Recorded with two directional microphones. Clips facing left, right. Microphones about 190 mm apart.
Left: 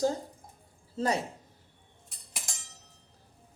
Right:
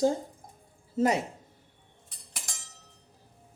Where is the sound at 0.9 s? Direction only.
20° right (ahead or behind).